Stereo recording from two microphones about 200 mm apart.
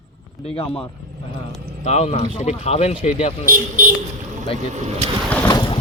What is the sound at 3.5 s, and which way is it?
Speech, 40° right (ahead or behind).